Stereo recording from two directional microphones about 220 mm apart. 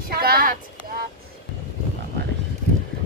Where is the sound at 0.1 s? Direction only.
45° right (ahead or behind).